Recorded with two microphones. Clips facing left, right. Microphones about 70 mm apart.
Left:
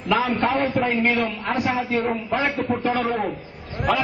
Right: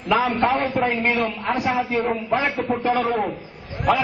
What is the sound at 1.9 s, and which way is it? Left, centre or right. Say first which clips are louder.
Speech: right 1 dB; centre.